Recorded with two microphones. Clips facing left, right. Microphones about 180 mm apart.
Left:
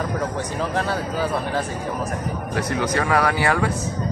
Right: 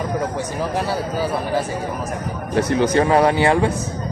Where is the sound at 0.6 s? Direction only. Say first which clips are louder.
Right 1 dB; 10° right (ahead or behind).